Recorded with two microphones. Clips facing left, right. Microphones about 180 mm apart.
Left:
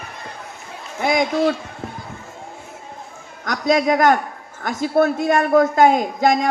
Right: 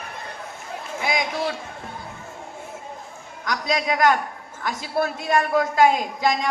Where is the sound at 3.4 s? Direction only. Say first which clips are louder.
Left 7 dB; 50° left (ahead or behind).